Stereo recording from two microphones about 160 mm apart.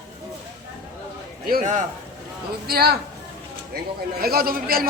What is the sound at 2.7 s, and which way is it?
Speech, 75° right (ahead or behind).